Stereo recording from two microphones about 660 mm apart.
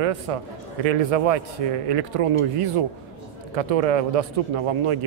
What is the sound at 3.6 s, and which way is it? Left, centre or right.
A man's voice, right.